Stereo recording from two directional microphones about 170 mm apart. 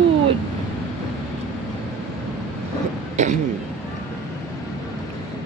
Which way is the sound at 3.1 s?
45° right (ahead or behind).